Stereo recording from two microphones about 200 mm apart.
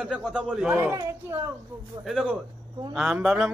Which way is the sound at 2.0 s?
5° right (ahead or behind).